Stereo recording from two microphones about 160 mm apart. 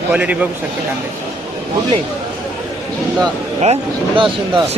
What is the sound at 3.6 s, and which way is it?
Speech, 35° right (ahead or behind).